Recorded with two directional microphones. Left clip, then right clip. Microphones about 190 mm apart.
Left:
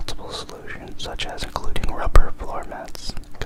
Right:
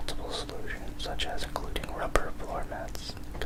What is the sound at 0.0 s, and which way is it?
Whispering, 25° left (ahead or behind).